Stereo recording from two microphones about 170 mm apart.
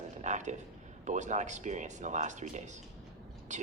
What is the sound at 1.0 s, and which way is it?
Speech, 45° right (ahead or behind).